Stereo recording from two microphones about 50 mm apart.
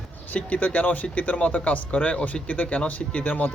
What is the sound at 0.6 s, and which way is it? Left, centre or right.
Speech, left.